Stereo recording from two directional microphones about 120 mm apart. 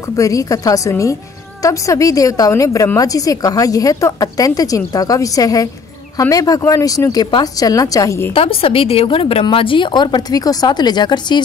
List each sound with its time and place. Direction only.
0.1 s a woman's voice: 30° left (ahead or behind)
8.4 s a woman's voice: 50° left (ahead or behind)